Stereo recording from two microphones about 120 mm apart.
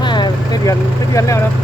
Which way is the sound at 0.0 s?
40° left (ahead or behind).